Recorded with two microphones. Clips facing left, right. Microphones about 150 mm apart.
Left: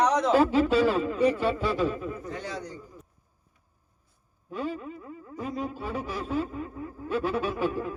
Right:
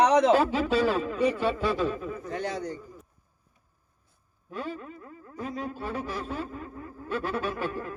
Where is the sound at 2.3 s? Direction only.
55° right (ahead or behind).